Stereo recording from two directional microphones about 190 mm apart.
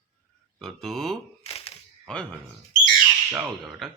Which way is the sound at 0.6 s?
Centre (ahead or behind).